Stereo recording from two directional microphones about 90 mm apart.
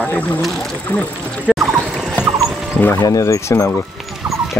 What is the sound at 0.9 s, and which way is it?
Speech, 25° left (ahead or behind).